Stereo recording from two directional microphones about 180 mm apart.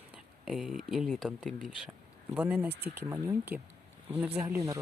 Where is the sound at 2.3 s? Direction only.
10° right (ahead or behind).